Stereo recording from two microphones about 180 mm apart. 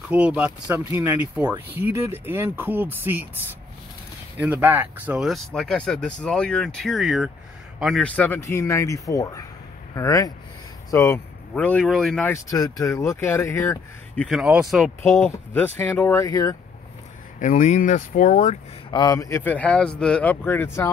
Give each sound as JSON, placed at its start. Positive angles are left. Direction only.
{"t": 0.1, "sound": "speech", "side_deg": -5}
{"t": 4.4, "sound": "speech", "side_deg": -10}
{"t": 12.4, "sound": "speech", "side_deg": 20}
{"t": 14.3, "sound": "speech", "side_deg": -5}
{"t": 15.2, "sound": "speech", "side_deg": 10}
{"t": 17.4, "sound": "speech", "side_deg": 45}
{"t": 18.9, "sound": "speech", "side_deg": 20}